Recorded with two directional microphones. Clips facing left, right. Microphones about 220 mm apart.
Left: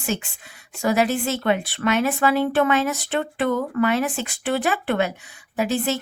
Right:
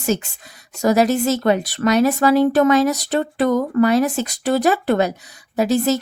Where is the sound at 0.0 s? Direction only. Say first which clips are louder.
Right 6 dB; 40° right (ahead or behind).